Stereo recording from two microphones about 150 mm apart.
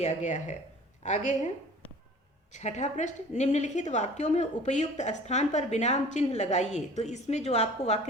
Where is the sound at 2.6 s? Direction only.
50° left (ahead or behind).